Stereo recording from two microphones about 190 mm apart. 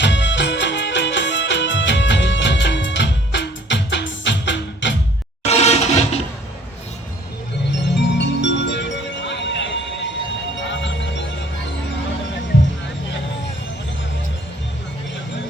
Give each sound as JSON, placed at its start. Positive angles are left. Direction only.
{"t": 0.0, "sound": "music", "side_deg": 65}
{"t": 5.5, "sound": "music", "side_deg": 35}
{"t": 7.8, "sound": "music", "side_deg": 65}